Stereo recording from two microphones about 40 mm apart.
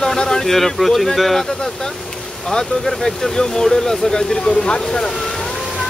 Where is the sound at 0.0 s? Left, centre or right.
Centre.